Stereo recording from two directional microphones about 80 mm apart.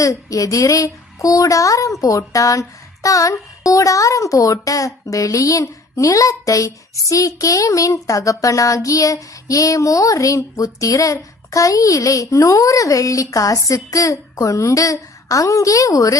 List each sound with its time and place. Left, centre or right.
0.0 s speech: left